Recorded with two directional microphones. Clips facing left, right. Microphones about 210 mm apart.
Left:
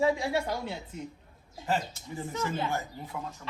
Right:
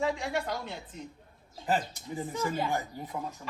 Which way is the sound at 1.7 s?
15° right (ahead or behind).